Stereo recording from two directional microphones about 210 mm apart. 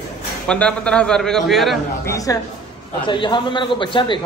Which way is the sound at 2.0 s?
15° left (ahead or behind).